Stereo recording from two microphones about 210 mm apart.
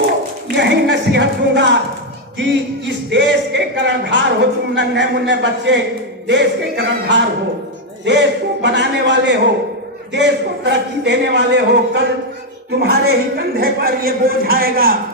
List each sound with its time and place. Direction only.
0.5 s speech: 55° right (ahead or behind)